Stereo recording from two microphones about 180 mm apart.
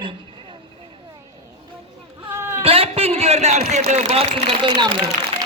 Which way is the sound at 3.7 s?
40° right (ahead or behind).